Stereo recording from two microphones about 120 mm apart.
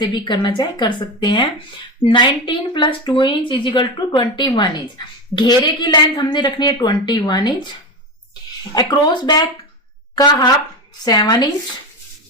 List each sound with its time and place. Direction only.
0.0 s a woman's voice: 40° left (ahead or behind)
8.7 s a woman's voice: 35° left (ahead or behind)
11.0 s a woman's voice: 35° left (ahead or behind)